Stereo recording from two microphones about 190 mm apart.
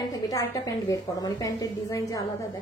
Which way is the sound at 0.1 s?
20° left (ahead or behind).